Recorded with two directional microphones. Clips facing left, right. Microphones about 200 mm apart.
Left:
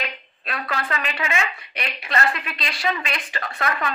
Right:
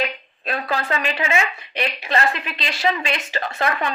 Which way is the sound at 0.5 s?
25° right (ahead or behind).